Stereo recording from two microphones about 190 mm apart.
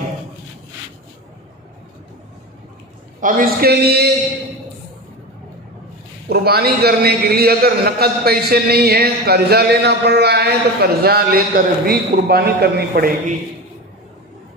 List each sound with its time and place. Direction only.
3.2 s a man's voice: 45° right (ahead or behind)
6.2 s a man's voice: 55° right (ahead or behind)